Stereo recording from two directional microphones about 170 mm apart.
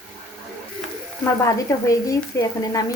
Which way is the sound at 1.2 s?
20° left (ahead or behind).